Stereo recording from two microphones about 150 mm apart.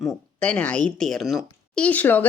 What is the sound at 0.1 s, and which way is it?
Speech, 10° left (ahead or behind).